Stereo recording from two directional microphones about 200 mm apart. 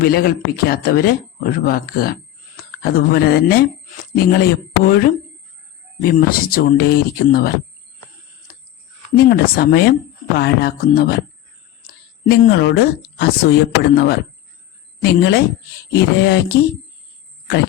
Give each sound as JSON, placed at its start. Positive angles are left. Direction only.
{"t": 0.0, "sound": "speech", "side_deg": 45}
{"t": 9.1, "sound": "speech", "side_deg": 50}
{"t": 12.3, "sound": "speech", "side_deg": 55}
{"t": 16.0, "sound": "a sound", "side_deg": 55}